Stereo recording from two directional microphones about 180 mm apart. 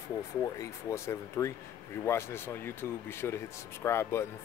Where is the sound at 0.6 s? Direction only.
15° left (ahead or behind).